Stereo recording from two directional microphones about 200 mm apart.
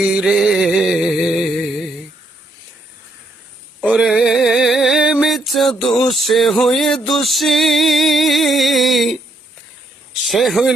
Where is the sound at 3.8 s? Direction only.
5° right (ahead or behind).